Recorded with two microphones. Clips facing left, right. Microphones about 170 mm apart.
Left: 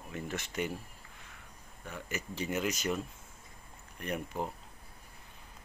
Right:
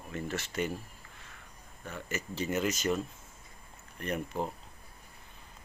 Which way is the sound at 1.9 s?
15° left (ahead or behind).